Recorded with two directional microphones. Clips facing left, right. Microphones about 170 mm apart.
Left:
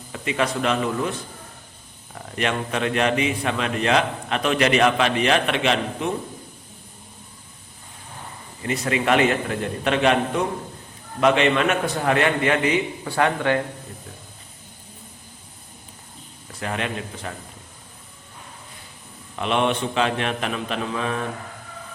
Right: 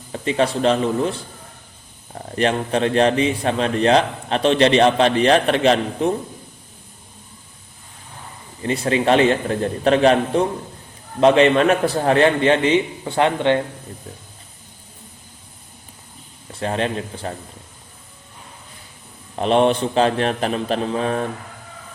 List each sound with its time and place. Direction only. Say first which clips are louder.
0.1 s a man's voice: right 5 dB; 30° right (ahead or behind)
8.6 s a man's voice: right 4 dB; 30° right (ahead or behind)
16.5 s a man's voice: right 5 dB; 30° right (ahead or behind)
19.4 s a man's voice: right 6 dB; 35° right (ahead or behind)